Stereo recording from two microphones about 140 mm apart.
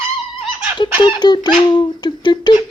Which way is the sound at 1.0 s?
35° left (ahead or behind).